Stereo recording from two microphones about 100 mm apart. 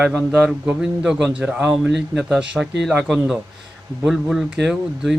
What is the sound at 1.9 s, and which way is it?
Speech, 10° right (ahead or behind).